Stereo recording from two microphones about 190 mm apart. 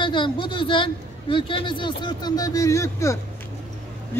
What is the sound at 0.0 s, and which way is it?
A woman's voice, 25° left (ahead or behind).